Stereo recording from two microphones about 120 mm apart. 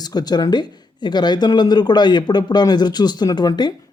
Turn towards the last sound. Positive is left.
turn(degrees=35)  # may be behind; listen again after turning